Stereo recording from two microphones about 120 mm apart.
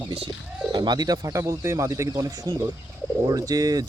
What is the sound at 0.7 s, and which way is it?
Speech, 35° right (ahead or behind).